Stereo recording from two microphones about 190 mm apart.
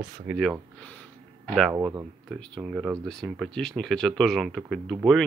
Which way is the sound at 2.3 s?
Centre (ahead or behind).